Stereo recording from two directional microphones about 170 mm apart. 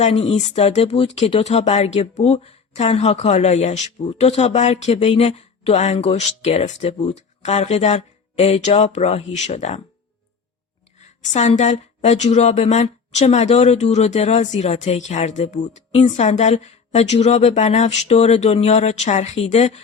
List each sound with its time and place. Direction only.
0.0 s a woman's voice: 40° left (ahead or behind)
11.3 s a woman's voice: 45° left (ahead or behind)